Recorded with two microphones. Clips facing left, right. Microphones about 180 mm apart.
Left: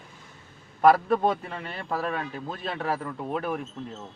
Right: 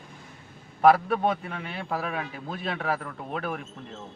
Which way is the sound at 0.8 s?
5° right (ahead or behind).